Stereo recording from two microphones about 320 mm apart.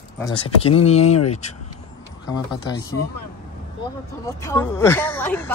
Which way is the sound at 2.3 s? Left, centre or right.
Centre.